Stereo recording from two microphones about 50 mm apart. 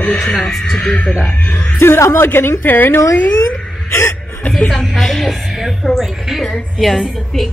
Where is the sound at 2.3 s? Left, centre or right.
Left.